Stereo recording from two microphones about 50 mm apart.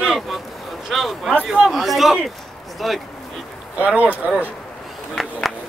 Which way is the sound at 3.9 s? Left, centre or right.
Right.